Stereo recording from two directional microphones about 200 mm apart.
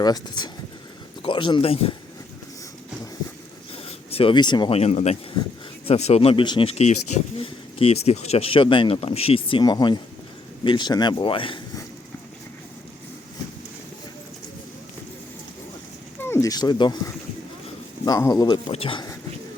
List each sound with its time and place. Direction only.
0.0 s speech: 20° left (ahead or behind)
3.8 s speech: 30° left (ahead or behind)
16.2 s speech: 15° left (ahead or behind)